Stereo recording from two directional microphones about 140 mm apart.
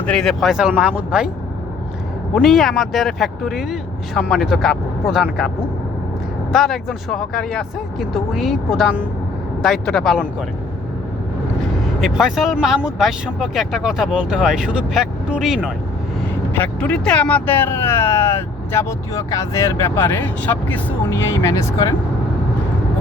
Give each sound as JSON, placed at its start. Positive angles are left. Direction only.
{"t": 0.0, "sound": "speech", "side_deg": 5}
{"t": 2.3, "sound": "speech", "side_deg": 0}
{"t": 6.5, "sound": "speech", "side_deg": 0}
{"t": 11.9, "sound": "speech", "side_deg": -5}
{"t": 16.6, "sound": "speech", "side_deg": 10}